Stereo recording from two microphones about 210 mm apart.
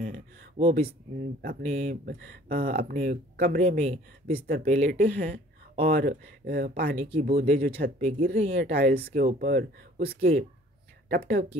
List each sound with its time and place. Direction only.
0.6 s speech: 25° right (ahead or behind)
1.4 s speech: 40° right (ahead or behind)
2.0 s speech: 45° right (ahead or behind)
2.7 s speech: 35° right (ahead or behind)
4.5 s speech: 40° right (ahead or behind)
5.9 s speech: 45° right (ahead or behind)
7.0 s speech: 35° right (ahead or behind)